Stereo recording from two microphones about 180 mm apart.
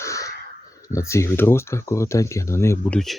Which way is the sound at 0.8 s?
15° left (ahead or behind).